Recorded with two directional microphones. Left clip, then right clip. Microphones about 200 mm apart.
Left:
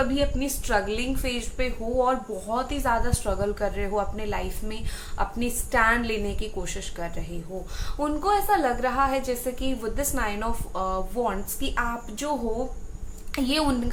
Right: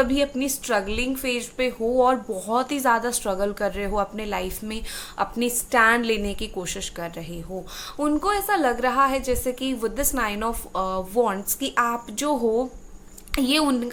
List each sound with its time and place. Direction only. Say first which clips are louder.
0.0 s a woman's voice: right 3 dB; 45° right (ahead or behind)
13.3 s a woman's voice: right 3 dB; 40° right (ahead or behind)